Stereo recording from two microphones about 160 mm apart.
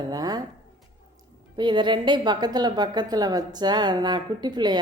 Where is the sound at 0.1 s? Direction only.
25° right (ahead or behind).